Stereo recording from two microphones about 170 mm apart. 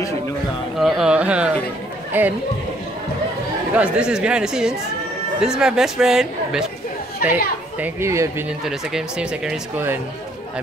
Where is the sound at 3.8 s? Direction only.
5° right (ahead or behind).